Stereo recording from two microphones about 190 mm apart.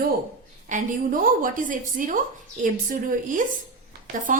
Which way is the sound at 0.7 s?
45° right (ahead or behind).